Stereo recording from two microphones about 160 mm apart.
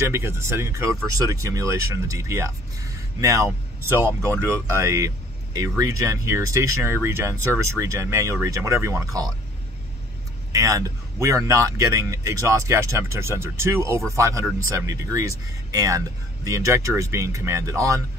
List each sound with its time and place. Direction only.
0.0 s speech: 15° right (ahead or behind)
10.5 s speech: 20° right (ahead or behind)